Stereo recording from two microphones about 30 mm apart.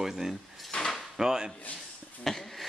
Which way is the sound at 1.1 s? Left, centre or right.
Centre.